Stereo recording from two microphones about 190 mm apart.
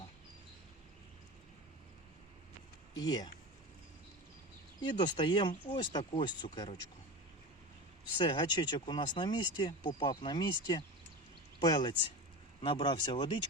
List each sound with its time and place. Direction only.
2.9 s speech: 20° left (ahead or behind)
4.8 s speech: 25° left (ahead or behind)
8.2 s speech: 25° left (ahead or behind)